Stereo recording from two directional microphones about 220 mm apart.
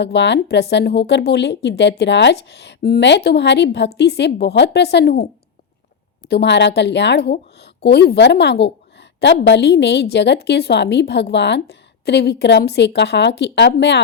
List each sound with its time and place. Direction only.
0.0 s a woman's voice: 50° left (ahead or behind)